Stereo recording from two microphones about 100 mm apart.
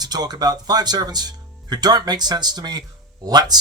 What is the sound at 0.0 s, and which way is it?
Speech, 45° right (ahead or behind).